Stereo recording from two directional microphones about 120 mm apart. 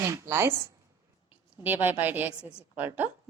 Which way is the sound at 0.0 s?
20° right (ahead or behind).